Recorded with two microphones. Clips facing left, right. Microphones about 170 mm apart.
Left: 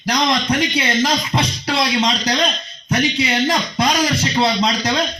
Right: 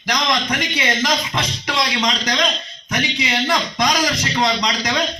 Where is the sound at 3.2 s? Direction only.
30° left (ahead or behind).